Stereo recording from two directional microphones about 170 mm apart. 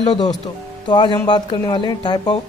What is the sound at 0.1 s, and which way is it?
Speech, 25° left (ahead or behind).